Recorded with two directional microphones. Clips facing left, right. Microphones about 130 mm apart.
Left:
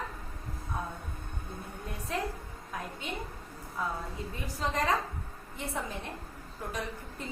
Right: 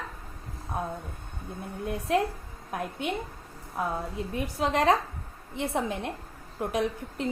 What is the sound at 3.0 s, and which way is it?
A woman's voice, 65° right (ahead or behind).